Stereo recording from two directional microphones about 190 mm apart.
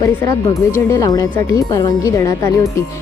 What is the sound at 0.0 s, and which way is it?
Speech, 20° left (ahead or behind).